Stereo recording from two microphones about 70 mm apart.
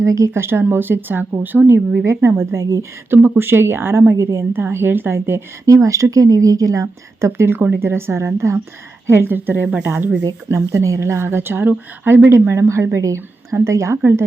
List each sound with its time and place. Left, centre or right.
0.0 s a woman's voice: right
0.3 s a woman's voice: right
3.2 s a woman's voice: right
5.6 s a woman's voice: right
10.5 s a woman's voice: right